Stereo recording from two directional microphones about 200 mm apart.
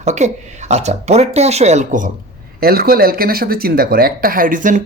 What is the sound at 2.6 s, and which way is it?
Speech, 50° right (ahead or behind).